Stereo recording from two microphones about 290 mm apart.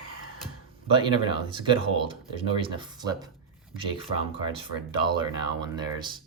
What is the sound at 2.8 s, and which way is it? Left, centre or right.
Speech, centre.